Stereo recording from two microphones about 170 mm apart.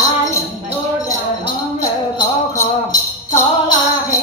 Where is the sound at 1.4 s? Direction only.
25° left (ahead or behind).